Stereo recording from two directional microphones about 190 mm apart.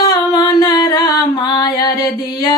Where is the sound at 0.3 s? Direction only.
20° left (ahead or behind).